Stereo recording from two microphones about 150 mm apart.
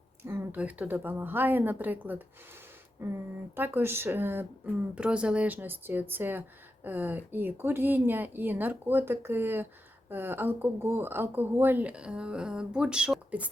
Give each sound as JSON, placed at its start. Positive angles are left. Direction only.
{"t": 0.2, "sound": "speech", "side_deg": -15}